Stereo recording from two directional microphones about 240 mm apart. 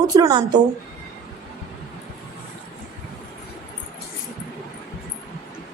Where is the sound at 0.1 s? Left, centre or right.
Centre.